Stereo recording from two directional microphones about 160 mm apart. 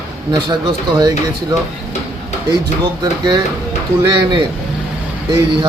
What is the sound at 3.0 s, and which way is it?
Speech, 30° right (ahead or behind).